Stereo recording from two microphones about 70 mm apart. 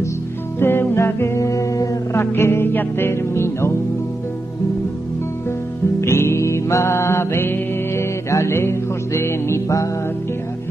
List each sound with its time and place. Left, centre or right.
0.6 s music: left
2.1 s music: left
5.9 s music: left